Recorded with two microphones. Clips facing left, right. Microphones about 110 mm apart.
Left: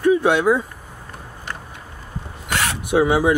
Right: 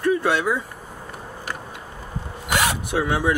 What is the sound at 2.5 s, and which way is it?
Zipper, 15° right (ahead or behind).